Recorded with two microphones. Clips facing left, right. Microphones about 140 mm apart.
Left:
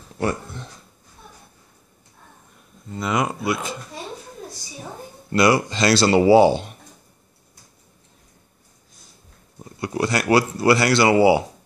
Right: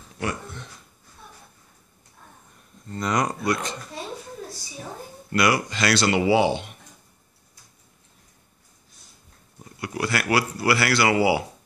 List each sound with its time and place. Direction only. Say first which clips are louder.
0.2 s a sound: left 5 dB; 35° left (ahead or behind)
2.9 s speech: left 1 dB; 5° left (ahead or behind)
5.3 s speech: left 4 dB; 30° left (ahead or behind)
9.8 s speech: left 4 dB; 25° left (ahead or behind)